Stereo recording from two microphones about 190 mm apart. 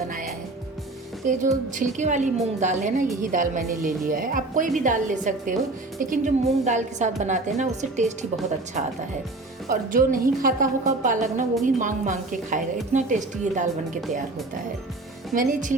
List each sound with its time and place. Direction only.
1.2 s a woman's voice: 45° right (ahead or behind)
9.6 s a woman's voice: 45° right (ahead or behind)